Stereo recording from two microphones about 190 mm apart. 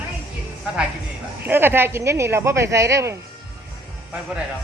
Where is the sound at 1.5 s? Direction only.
10° right (ahead or behind).